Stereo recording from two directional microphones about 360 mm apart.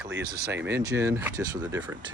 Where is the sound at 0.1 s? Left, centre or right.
Right.